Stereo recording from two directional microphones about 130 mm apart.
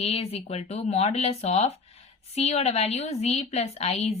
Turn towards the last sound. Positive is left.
turn(degrees=55)  # may be behind; listen again after turning